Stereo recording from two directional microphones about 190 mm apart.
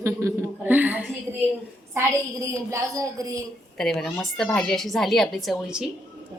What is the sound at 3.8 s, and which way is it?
Speech, centre (ahead or behind).